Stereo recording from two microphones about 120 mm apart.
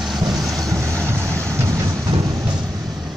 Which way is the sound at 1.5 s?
25° right (ahead or behind).